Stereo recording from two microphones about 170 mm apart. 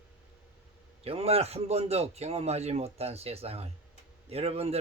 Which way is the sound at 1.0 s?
35° right (ahead or behind).